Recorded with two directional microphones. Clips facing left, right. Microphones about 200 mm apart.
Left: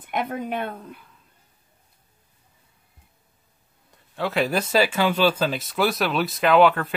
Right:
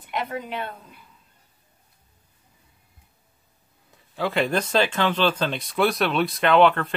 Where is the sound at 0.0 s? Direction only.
50° left (ahead or behind).